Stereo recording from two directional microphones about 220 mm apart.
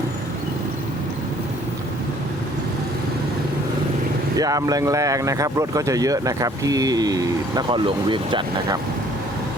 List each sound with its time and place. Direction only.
4.4 s speech: 15° right (ahead or behind)